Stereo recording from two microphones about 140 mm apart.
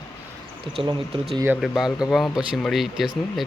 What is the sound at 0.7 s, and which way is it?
Speech, 40° right (ahead or behind).